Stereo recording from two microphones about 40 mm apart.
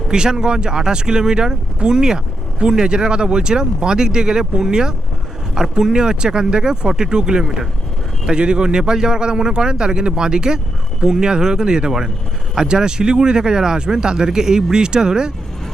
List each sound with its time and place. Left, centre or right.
0.1 s speech: centre